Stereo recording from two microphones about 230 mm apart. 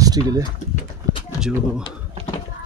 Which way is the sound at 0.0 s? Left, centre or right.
Centre.